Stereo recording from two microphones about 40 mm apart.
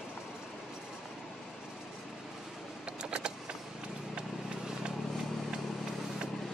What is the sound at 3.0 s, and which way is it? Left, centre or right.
Vehicle, right.